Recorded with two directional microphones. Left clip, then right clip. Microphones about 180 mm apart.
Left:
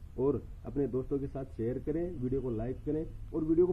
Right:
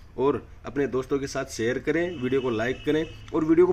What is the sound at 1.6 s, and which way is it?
Speech, 10° right (ahead or behind).